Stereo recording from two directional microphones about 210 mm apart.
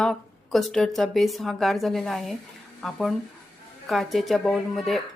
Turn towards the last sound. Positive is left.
turn(degrees=0)  # may be behind; listen again after turning